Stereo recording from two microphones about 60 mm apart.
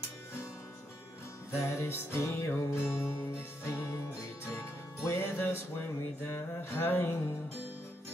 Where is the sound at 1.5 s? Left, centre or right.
Left.